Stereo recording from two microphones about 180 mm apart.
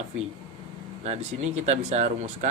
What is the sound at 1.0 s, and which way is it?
Speech, 35° right (ahead or behind).